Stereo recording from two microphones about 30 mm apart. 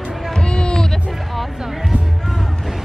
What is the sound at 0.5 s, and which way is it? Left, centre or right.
Music, left.